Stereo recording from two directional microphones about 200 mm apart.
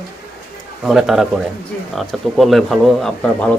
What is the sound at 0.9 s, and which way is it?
Speech, centre (ahead or behind).